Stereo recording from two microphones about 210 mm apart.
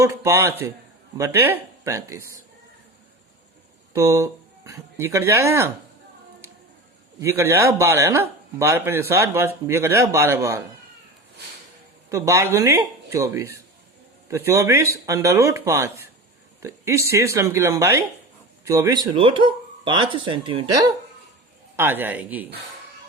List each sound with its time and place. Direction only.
0.0 s a man's voice: 10° right (ahead or behind)
3.9 s speech: 15° right (ahead or behind)
7.2 s a man's voice: 10° right (ahead or behind)
12.0 s a man's voice: 15° right (ahead or behind)